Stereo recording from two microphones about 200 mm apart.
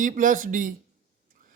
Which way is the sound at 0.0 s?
40° right (ahead or behind).